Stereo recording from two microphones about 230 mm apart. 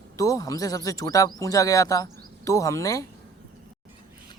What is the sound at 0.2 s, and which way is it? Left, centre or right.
Speech, centre.